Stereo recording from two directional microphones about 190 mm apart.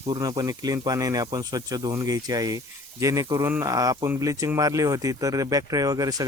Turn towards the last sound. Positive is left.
turn(degrees=-20)  # may be behind; listen again after turning